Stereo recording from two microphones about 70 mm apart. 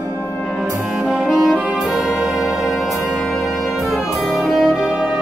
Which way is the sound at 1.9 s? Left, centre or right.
Centre.